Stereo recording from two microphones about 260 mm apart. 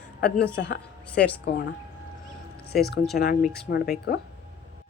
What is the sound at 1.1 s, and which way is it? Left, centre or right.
Speech, centre.